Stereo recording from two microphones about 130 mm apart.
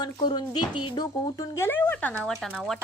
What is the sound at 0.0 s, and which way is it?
Speech, 35° left (ahead or behind).